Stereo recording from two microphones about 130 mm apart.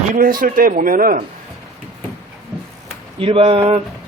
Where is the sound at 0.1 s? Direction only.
90° right.